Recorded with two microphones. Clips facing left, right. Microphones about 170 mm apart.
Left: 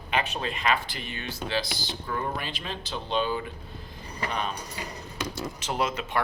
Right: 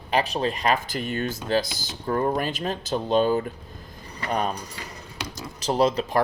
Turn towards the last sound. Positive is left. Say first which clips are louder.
# right 7 dB
turn(degrees=-35)  # may be behind; listen again after turning